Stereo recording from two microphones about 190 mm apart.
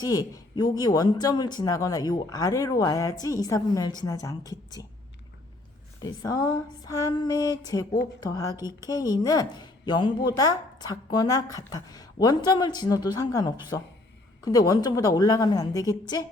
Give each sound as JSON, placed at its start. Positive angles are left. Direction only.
{"t": 0.0, "sound": "a woman's voice", "side_deg": 20}
{"t": 6.2, "sound": "a woman's voice", "side_deg": 20}